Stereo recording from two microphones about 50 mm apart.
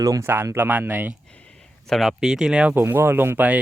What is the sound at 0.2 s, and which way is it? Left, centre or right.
Speech, right.